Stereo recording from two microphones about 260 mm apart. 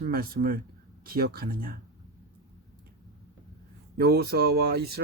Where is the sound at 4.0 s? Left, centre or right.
Right.